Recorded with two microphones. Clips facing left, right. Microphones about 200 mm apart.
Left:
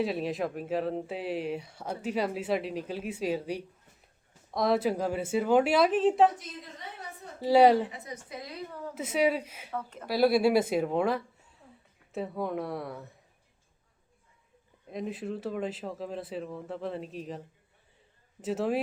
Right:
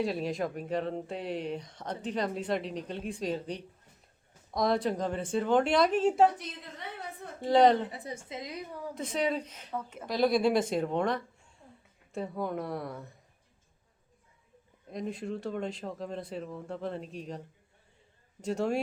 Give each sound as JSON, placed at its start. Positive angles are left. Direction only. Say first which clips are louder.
{"t": 0.0, "sound": "speech", "louder": "left 1 dB", "side_deg": 0}
{"t": 6.8, "sound": "a woman's voice", "louder": "right 5 dB", "side_deg": -65}
{"t": 7.3, "sound": "a woman's voice", "louder": "left 2 dB", "side_deg": 5}
{"t": 7.9, "sound": "a woman's voice", "louder": "right 1 dB", "side_deg": -30}
{"t": 9.0, "sound": "a woman's voice", "louder": "left 4 dB", "side_deg": 5}
{"t": 9.7, "sound": "speech", "louder": "even", "side_deg": -5}
{"t": 10.1, "sound": "speech", "louder": "left 2 dB", "side_deg": 5}
{"t": 14.8, "sound": "speech", "louder": "left 1 dB", "side_deg": 0}
{"t": 18.4, "sound": "speech", "louder": "left 1 dB", "side_deg": 5}